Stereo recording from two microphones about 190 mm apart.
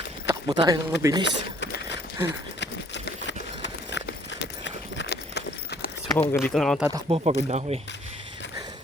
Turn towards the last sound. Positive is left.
turn(degrees=-35)  # may be behind; listen again after turning